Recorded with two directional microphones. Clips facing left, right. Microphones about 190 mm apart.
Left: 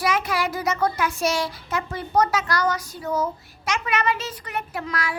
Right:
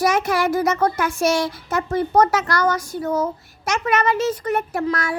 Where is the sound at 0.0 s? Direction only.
45° right (ahead or behind).